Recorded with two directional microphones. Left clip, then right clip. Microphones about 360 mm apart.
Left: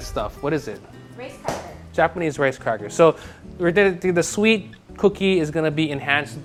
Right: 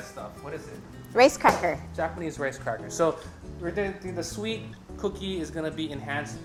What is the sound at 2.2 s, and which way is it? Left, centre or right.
Speech, left.